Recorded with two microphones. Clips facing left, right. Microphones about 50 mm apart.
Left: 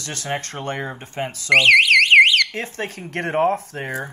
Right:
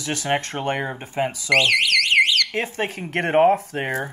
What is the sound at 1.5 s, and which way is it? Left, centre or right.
Alarm, centre.